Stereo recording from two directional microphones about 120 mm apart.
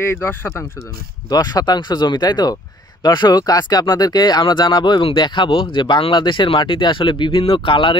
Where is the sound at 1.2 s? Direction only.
35° left (ahead or behind).